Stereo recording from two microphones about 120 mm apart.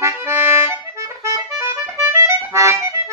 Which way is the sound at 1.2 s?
25° right (ahead or behind).